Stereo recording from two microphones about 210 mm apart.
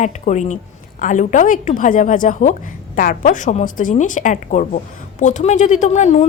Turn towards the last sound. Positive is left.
turn(degrees=35)  # may be behind; listen again after turning